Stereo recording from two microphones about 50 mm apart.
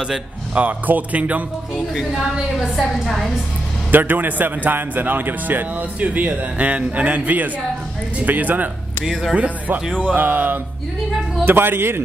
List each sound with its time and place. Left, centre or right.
0.6 s speech: right
2.7 s a woman's voice: centre
3.9 s a man's voice: right
5.9 s a man's voice: right
9.0 s a woman's voice: centre
9.3 s a man's voice: right